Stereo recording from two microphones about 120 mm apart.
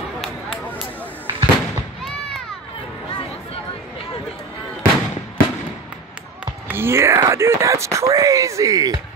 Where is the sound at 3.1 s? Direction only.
45° left (ahead or behind).